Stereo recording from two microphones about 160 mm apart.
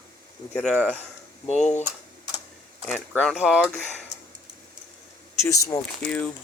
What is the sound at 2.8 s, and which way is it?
Speech, 5° left (ahead or behind).